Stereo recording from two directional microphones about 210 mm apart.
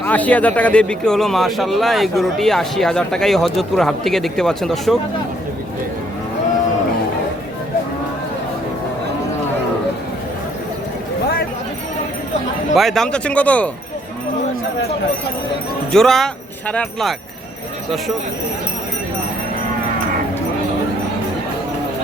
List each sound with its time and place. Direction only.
0.0 s speech: 10° left (ahead or behind)
12.7 s speech: centre (ahead or behind)
15.9 s speech: centre (ahead or behind)